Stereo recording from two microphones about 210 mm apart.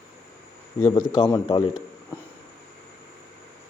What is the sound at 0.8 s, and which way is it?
Speech, 15° left (ahead or behind).